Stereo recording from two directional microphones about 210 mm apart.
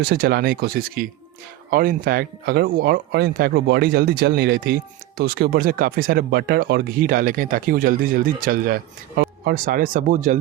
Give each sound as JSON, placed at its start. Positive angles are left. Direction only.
{"t": 0.0, "sound": "speech", "side_deg": -50}